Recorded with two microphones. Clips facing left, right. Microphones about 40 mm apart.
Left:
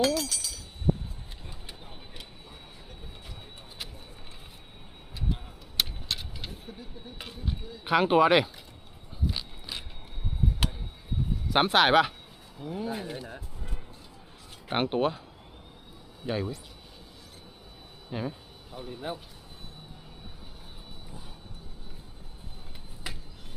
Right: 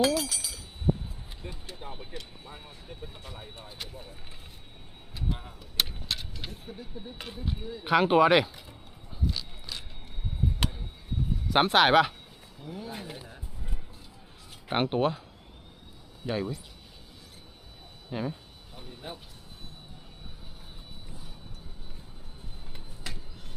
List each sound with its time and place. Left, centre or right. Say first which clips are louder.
0.0 s a sound: right 1 dB; centre
2.5 s vehicle: right 3 dB; centre
5.3 s vehicle: left 1 dB; centre
7.9 s speech: even; centre
9.3 s a sound: left 1 dB; centre
10.6 s tick: even; centre
11.4 s speech: right 1 dB; centre
14.7 s speech: even; centre
16.2 s speech: even; centre
18.1 s speech: right 1 dB; centre
23.1 s a sound: left 1 dB; centre